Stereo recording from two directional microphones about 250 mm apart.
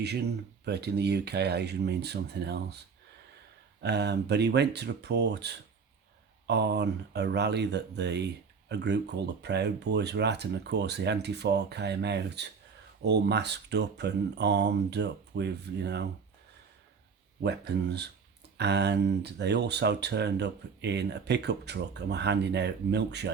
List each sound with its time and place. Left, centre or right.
0.0 s speech: right
17.4 s speech: right